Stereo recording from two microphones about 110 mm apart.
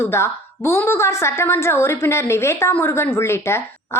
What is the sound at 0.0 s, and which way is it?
A woman's voice, 25° left (ahead or behind).